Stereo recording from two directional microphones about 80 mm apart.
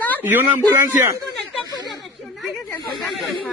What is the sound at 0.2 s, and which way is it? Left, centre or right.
Speech, right.